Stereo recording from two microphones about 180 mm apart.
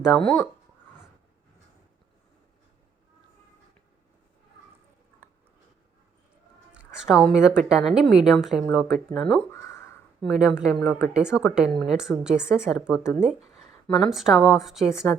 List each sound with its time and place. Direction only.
0.0 s speech: centre (ahead or behind)
6.7 s a woman's voice: 5° right (ahead or behind)
9.5 s a sound: 15° left (ahead or behind)
10.2 s speech: centre (ahead or behind)